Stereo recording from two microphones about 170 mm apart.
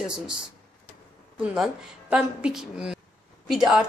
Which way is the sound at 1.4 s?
5° right (ahead or behind).